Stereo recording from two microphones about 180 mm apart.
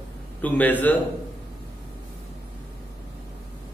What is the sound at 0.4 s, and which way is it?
Speech, 10° left (ahead or behind).